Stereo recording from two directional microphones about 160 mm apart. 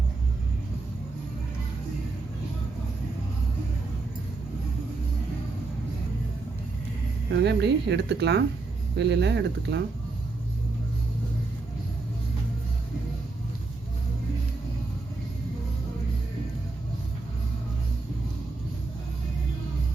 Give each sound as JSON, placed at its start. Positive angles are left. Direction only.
{"t": 7.3, "sound": "speech", "side_deg": -90}